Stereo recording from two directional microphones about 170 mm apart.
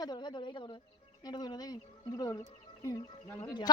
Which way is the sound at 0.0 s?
25° left (ahead or behind).